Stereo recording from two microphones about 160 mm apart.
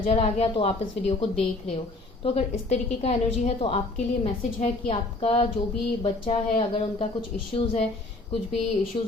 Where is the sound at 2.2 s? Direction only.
40° left (ahead or behind).